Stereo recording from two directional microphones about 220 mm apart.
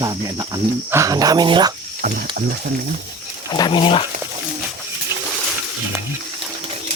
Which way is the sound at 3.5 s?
20° left (ahead or behind).